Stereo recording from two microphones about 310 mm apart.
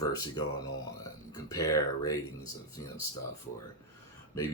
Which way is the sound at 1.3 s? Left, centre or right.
Centre.